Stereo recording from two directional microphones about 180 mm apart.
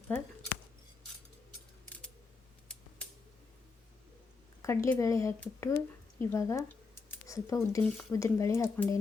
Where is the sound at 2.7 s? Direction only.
5° left (ahead or behind).